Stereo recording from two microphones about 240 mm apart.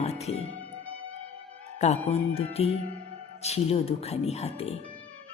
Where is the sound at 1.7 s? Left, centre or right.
Left.